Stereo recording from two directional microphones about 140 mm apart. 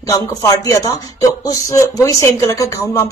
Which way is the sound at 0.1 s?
25° left (ahead or behind).